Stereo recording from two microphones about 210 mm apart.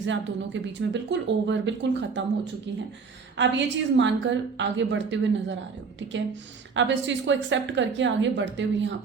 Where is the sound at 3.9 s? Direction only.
60° right (ahead or behind).